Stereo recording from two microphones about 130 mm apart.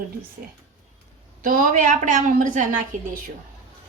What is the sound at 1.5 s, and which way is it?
A woman's voice, 90° right.